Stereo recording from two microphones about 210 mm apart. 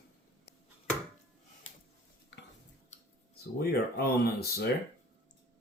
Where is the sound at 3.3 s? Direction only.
50° left (ahead or behind).